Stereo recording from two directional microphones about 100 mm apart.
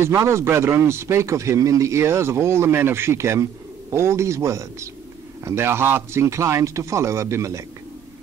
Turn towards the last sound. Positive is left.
turn(degrees=-30)  # may be behind; listen again after turning